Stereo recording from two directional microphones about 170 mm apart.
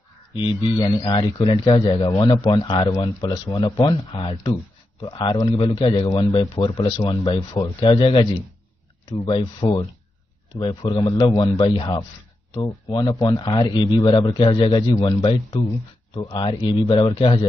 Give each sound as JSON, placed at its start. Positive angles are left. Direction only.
{"t": 0.4, "sound": "a man's voice", "side_deg": 30}
{"t": 1.6, "sound": "a man's voice", "side_deg": 20}